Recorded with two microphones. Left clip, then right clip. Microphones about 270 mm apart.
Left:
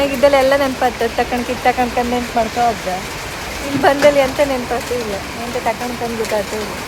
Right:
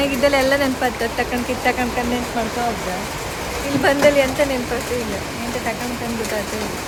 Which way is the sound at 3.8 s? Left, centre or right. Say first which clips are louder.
Left 3 dB; centre.